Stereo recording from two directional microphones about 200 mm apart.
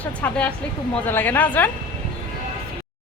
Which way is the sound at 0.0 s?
5° left (ahead or behind).